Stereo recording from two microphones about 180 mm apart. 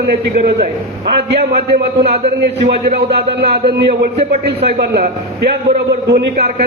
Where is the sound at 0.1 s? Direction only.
65° right (ahead or behind).